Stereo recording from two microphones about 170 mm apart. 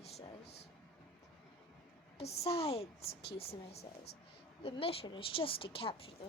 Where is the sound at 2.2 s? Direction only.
40° left (ahead or behind).